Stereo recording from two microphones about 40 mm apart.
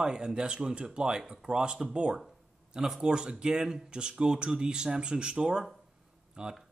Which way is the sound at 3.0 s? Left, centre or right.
Centre.